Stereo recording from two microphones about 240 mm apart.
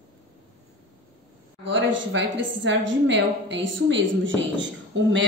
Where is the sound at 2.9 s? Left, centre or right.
Right.